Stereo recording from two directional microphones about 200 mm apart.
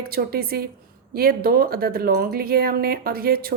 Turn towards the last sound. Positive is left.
turn(degrees=-50)  # may be behind; listen again after turning